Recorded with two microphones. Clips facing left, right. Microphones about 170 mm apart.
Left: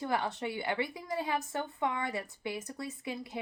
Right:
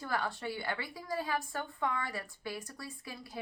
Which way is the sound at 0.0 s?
20° left (ahead or behind).